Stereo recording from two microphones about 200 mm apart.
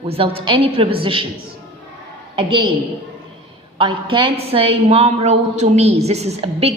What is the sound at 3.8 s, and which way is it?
A woman's voice, 25° right (ahead or behind).